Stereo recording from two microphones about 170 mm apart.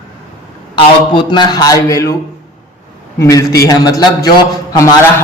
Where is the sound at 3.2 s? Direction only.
20° left (ahead or behind).